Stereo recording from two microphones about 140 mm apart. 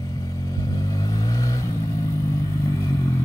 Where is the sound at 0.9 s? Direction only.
25° left (ahead or behind).